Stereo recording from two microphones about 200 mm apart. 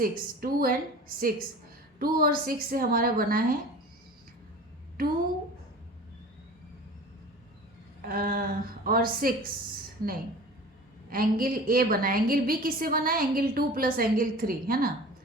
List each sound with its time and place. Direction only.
0.0 s a woman's voice: 45° right (ahead or behind)
5.0 s a woman's voice: 45° right (ahead or behind)
8.0 s a woman's voice: 45° right (ahead or behind)
11.1 s a woman's voice: 45° right (ahead or behind)